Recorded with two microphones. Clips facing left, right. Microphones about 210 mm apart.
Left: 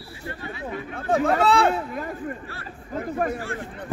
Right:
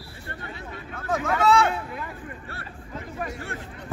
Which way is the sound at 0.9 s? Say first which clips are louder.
Left 5 dB; 30° left (ahead or behind).